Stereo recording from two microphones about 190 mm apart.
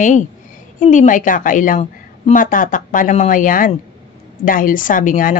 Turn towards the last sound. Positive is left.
turn(degrees=45)  # may be behind; listen again after turning